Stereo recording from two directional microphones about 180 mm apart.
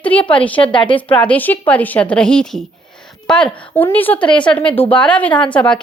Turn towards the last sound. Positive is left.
turn(degrees=5)  # may be behind; listen again after turning